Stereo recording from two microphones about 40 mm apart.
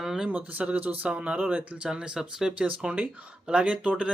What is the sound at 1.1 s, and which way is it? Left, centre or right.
Speech, right.